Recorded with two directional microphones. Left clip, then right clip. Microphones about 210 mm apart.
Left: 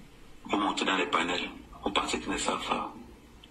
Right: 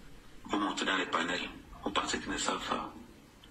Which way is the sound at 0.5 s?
Centre (ahead or behind).